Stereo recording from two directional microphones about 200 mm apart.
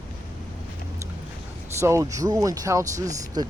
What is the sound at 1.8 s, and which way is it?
Speech, 15° right (ahead or behind).